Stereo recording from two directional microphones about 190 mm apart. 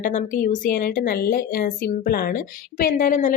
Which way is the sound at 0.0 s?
40° left (ahead or behind).